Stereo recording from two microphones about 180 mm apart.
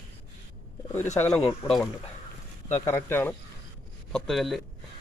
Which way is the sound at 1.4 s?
30° left (ahead or behind).